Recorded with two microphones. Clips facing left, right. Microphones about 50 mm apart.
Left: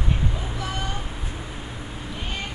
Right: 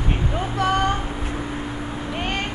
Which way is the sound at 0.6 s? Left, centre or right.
Right.